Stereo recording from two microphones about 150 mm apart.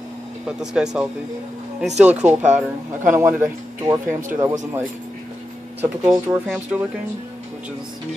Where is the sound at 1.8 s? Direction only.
50° right (ahead or behind).